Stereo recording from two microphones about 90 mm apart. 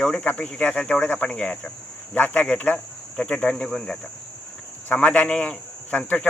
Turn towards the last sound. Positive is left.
turn(degrees=15)  # may be behind; listen again after turning